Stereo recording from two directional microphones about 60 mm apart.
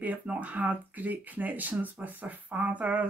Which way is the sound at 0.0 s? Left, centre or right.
Right.